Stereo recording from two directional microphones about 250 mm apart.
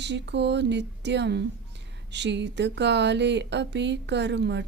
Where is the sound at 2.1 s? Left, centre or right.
Right.